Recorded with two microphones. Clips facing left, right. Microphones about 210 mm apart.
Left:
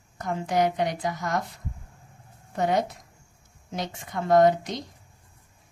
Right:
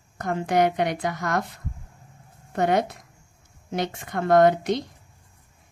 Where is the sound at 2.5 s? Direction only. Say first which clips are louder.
Right 3 dB; 65° right (ahead or behind).